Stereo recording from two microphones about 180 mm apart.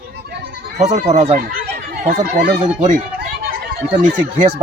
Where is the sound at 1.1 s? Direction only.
35° right (ahead or behind).